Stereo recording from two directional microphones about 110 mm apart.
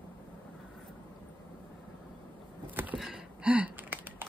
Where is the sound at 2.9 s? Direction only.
5° right (ahead or behind).